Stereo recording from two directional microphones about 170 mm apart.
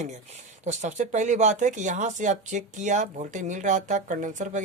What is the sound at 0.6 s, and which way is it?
Speech, 45° right (ahead or behind).